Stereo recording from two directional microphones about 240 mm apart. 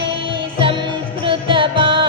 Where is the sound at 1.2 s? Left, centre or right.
Right.